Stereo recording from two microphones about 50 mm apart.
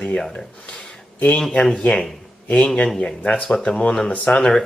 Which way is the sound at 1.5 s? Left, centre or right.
Centre.